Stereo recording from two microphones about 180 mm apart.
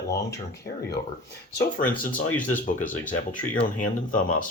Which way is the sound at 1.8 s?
50° left (ahead or behind).